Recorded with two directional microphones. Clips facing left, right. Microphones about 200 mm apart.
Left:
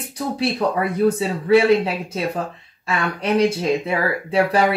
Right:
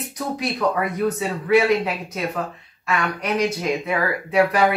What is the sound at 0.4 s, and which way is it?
Speech, 30° left (ahead or behind).